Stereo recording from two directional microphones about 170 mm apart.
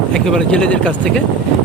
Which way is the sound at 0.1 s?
5° left (ahead or behind).